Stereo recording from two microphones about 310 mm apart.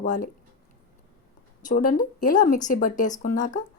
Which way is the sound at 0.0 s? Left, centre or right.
Left.